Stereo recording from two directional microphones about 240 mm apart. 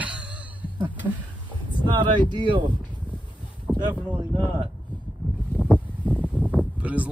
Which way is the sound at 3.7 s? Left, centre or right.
Centre.